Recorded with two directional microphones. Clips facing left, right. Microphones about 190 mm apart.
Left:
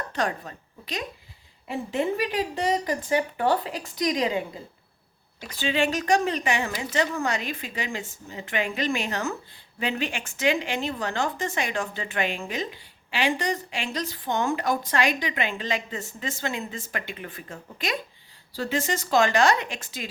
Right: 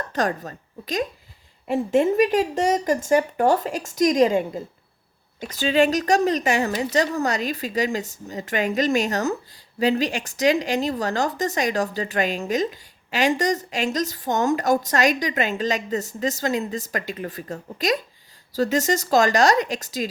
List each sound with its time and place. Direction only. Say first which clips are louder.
0.1 s a woman's voice: right 4 dB; 45° right (ahead or behind)